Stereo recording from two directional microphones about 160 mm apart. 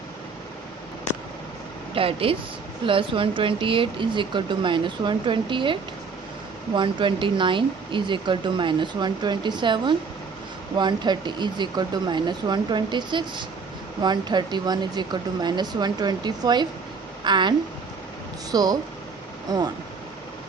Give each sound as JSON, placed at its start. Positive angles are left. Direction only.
{"t": 2.0, "sound": "speech", "side_deg": -35}
{"t": 6.7, "sound": "speech", "side_deg": -30}
{"t": 18.5, "sound": "speech", "side_deg": -25}